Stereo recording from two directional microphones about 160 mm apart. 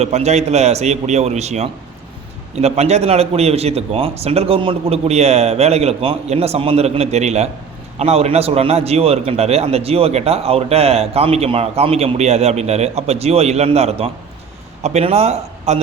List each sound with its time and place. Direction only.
0.0 s a man's voice: 40° right (ahead or behind)